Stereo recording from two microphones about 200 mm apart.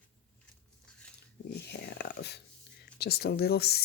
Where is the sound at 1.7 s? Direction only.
55° left (ahead or behind).